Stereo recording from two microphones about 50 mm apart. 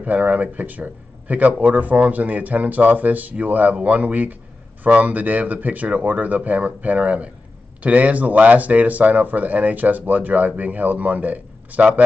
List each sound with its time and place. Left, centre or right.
0.0 s speech: right